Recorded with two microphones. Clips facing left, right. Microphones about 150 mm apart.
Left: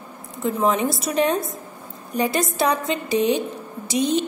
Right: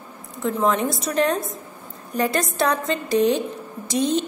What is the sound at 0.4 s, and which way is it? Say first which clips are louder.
A woman's voice: even; 5° left (ahead or behind).